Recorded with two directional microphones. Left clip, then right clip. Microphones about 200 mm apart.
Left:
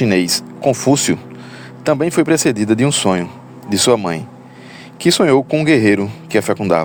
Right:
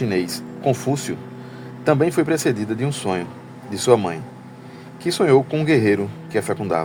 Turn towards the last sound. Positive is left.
turn(degrees=35)  # may be behind; listen again after turning